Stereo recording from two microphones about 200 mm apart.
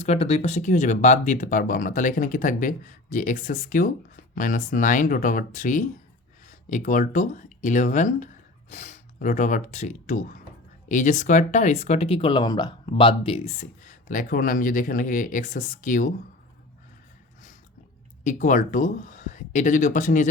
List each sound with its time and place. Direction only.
0.0 s speech: 30° left (ahead or behind)
18.2 s speech: 40° left (ahead or behind)